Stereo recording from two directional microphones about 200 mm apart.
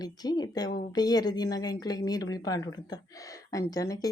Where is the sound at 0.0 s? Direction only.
20° left (ahead or behind).